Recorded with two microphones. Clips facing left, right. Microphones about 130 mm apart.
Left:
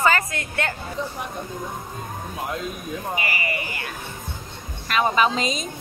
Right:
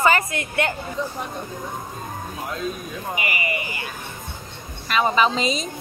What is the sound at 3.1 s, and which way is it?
Buzzer, 15° right (ahead or behind).